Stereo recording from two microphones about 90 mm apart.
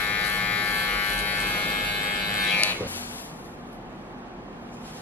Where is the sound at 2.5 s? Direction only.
20° left (ahead or behind).